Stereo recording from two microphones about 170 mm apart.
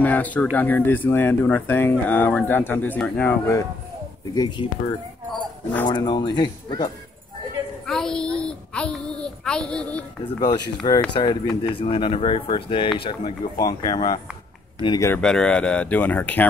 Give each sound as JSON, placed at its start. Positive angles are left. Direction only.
{"t": 0.0, "sound": "speech", "side_deg": 10}
{"t": 7.8, "sound": "a child's voice", "side_deg": 5}
{"t": 10.8, "sound": "speech", "side_deg": 25}
{"t": 15.0, "sound": "speech", "side_deg": 5}